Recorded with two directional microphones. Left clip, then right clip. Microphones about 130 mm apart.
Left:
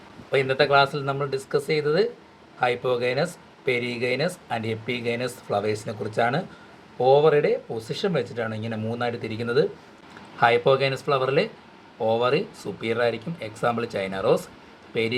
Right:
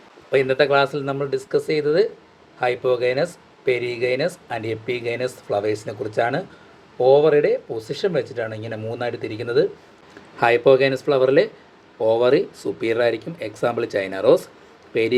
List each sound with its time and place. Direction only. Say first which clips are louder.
0.3 s speech: right 3 dB; 25° right (ahead or behind)